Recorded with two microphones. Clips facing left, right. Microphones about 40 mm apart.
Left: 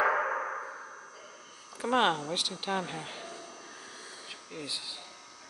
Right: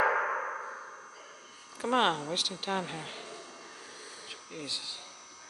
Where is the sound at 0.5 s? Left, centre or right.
Centre.